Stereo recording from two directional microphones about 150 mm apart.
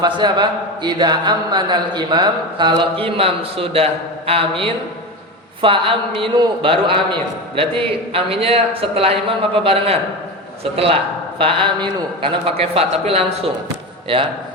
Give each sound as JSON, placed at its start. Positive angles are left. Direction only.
{"t": 0.0, "sound": "a man's voice", "side_deg": -30}